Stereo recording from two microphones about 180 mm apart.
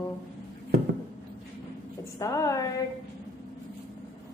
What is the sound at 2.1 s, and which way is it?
Speech, 15° left (ahead or behind).